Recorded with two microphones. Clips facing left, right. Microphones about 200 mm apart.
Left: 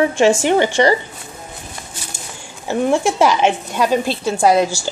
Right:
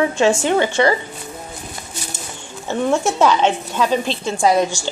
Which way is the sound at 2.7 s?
15° left (ahead or behind).